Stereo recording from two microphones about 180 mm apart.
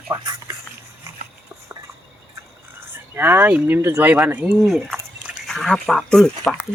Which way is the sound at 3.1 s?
10° right (ahead or behind).